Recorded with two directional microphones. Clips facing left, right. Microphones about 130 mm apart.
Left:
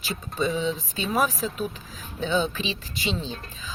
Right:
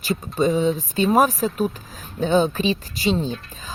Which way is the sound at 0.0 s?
45° right (ahead or behind).